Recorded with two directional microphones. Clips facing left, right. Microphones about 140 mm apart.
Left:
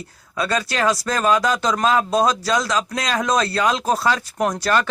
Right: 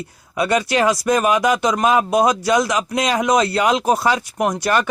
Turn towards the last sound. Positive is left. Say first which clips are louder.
# right 1 dB
turn(degrees=-15)  # may be behind; listen again after turning